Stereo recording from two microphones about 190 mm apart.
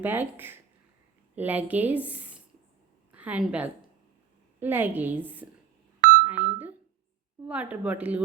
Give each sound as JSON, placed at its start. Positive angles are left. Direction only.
{"t": 0.0, "sound": "a woman's voice", "side_deg": -10}
{"t": 6.2, "sound": "a sound", "side_deg": -10}
{"t": 7.4, "sound": "speech", "side_deg": -5}